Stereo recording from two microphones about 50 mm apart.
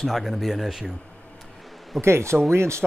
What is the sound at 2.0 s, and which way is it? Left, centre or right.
Speech, right.